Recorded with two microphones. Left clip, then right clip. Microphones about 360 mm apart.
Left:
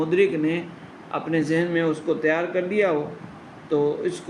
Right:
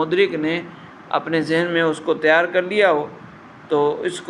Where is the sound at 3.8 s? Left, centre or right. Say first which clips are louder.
Right 4 dB; right.